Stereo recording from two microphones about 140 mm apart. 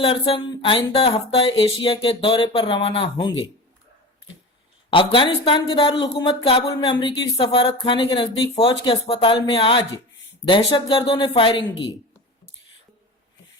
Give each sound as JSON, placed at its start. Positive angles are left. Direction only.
{"t": 0.0, "sound": "music", "side_deg": 35}
{"t": 4.9, "sound": "music", "side_deg": 40}